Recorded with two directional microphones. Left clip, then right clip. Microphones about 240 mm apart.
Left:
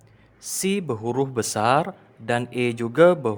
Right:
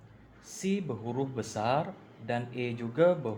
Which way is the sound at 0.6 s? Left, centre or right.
Left.